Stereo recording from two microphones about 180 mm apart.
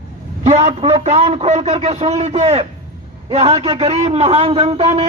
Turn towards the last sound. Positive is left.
turn(degrees=-35)  # may be behind; listen again after turning